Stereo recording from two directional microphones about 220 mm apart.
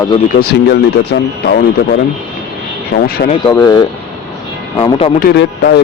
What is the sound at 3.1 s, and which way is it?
Speech, 45° left (ahead or behind).